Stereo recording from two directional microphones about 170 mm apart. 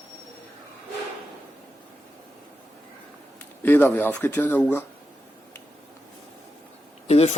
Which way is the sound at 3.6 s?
10° left (ahead or behind).